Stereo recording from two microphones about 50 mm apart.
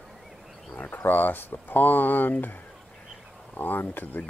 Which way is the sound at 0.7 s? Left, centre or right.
Left.